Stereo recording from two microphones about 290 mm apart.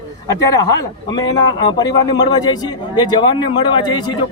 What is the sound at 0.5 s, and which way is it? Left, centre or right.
A man's voice, centre.